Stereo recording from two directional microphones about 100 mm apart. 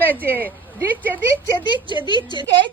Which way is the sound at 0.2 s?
20° right (ahead or behind).